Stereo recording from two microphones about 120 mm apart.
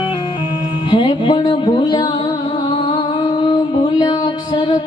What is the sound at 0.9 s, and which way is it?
Music, 40° left (ahead or behind).